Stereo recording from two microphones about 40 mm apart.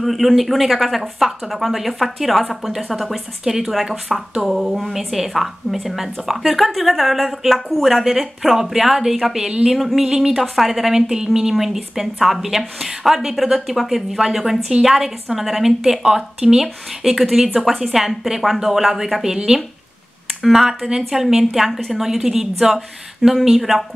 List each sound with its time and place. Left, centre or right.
0.0 s a woman's voice: centre
20.4 s a woman's voice: centre